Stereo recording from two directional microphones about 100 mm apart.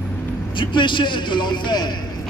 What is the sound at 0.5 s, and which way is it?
A man's voice, 55° left (ahead or behind).